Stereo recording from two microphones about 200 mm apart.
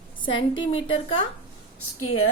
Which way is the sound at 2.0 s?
90° left.